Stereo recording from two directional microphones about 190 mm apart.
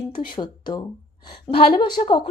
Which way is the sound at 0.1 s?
25° left (ahead or behind).